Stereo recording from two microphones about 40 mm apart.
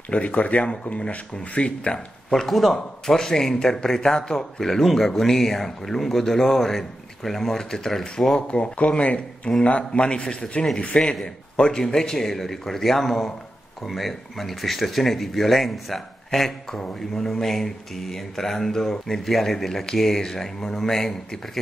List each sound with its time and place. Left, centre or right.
0.1 s speech: left
1.0 s speech: left
2.3 s speech: centre
3.1 s a man's voice: centre
8.4 s speech: left
10.0 s speech: left
11.5 s a man's voice: centre